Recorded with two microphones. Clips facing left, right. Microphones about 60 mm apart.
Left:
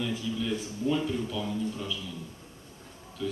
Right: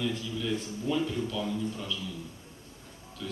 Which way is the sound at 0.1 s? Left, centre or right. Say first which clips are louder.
Left 1 dB; centre.